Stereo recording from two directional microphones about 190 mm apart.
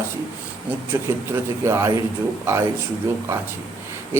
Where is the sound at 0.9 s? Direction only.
15° right (ahead or behind).